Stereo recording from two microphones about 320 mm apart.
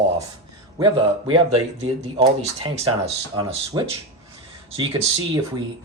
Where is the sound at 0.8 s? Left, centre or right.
Centre.